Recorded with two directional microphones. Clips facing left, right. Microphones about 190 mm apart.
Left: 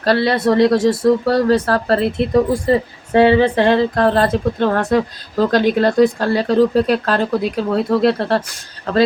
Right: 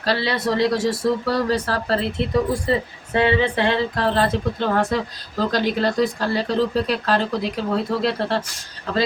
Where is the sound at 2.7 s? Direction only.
40° left (ahead or behind).